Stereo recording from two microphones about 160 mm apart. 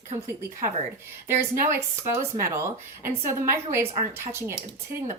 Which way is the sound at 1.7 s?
60° right (ahead or behind).